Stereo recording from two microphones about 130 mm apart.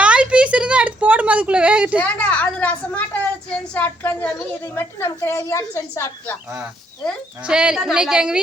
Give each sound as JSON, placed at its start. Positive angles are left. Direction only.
{"t": 0.0, "sound": "a sound", "side_deg": -10}
{"t": 2.0, "sound": "a woman's voice", "side_deg": 10}
{"t": 7.4, "sound": "a woman's voice", "side_deg": -5}